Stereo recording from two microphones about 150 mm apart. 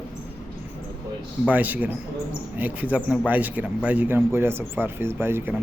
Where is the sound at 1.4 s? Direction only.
10° right (ahead or behind).